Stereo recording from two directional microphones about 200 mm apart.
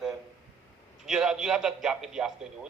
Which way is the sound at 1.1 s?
5° right (ahead or behind).